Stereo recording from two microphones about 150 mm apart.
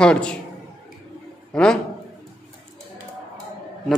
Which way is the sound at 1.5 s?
5° left (ahead or behind).